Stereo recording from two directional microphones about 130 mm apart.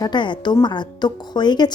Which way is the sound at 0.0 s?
35° left (ahead or behind).